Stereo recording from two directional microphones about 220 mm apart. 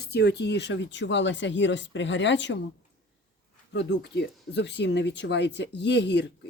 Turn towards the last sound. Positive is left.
turn(degrees=50)  # may be behind; listen again after turning